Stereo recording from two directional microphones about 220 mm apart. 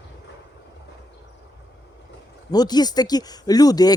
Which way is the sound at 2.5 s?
20° left (ahead or behind).